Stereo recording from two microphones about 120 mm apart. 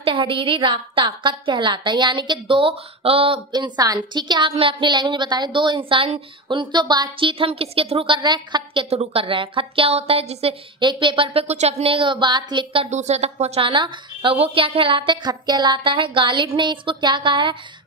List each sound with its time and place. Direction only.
0.0 s a woman's voice: 45° right (ahead or behind)
3.5 s a woman's voice: 35° right (ahead or behind)
8.9 s a woman's voice: 55° right (ahead or behind)
10.8 s a woman's voice: 40° right (ahead or behind)
11.4 s a woman's voice: 65° right (ahead or behind); by 12.8 s 40° right (ahead or behind)
12.9 s speech: 70° right (ahead or behind)
13.7 s a woman's voice: 45° right (ahead or behind)